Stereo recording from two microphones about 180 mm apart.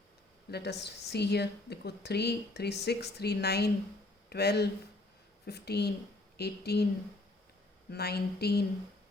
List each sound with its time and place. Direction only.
0.5 s a woman's voice: 70° left (ahead or behind)
7.9 s speech: 60° left (ahead or behind)